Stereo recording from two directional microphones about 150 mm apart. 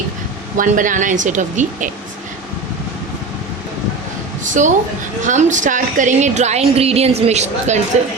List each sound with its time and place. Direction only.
0.5 s a woman's voice: 60° right (ahead or behind)
4.6 s a woman's voice: 60° right (ahead or behind)